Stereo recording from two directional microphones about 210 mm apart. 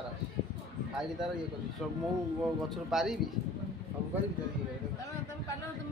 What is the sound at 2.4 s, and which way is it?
Speech, centre (ahead or behind).